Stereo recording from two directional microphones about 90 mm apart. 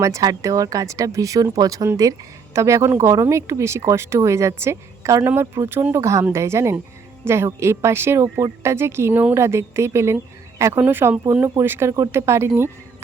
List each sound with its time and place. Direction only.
0.0 s speech: 40° right (ahead or behind)